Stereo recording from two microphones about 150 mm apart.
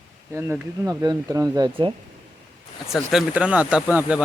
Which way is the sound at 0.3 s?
20° right (ahead or behind).